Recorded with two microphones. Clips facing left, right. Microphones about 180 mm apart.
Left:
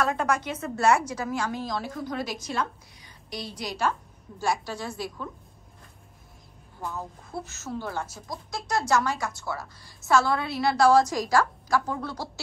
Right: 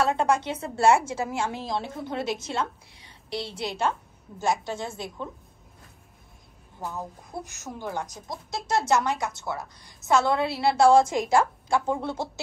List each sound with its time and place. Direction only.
0.0 s a woman's voice: 30° right (ahead or behind)
6.8 s a woman's voice: 20° right (ahead or behind)